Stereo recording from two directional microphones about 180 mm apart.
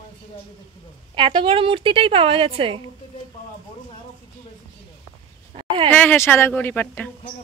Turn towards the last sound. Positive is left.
turn(degrees=10)  # may be behind; listen again after turning